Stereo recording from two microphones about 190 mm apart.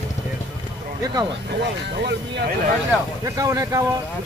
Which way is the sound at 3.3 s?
15° right (ahead or behind).